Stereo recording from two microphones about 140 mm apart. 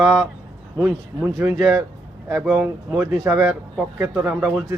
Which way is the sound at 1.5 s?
Centre (ahead or behind).